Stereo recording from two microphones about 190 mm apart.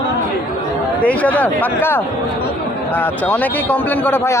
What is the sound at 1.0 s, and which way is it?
A man's voice, 10° left (ahead or behind).